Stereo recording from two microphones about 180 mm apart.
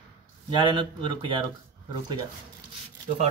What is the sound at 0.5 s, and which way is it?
Speech, 25° right (ahead or behind).